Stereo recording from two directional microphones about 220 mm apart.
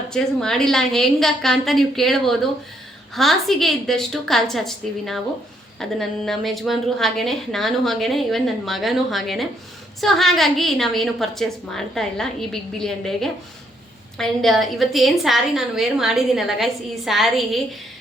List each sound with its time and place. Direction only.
0.1 s a woman's voice: 5° left (ahead or behind)